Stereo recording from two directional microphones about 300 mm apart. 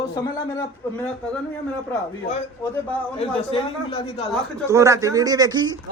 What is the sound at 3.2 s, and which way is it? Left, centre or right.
Speech, centre.